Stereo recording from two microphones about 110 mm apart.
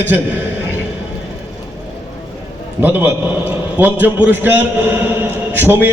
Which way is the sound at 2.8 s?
15° right (ahead or behind).